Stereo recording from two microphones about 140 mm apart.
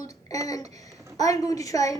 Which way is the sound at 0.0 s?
25° left (ahead or behind).